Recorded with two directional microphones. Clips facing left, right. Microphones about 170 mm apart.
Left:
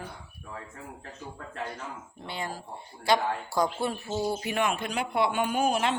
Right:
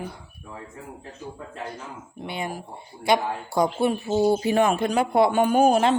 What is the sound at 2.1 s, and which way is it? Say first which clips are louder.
A man's voice: right 6 dB; 15° right (ahead or behind).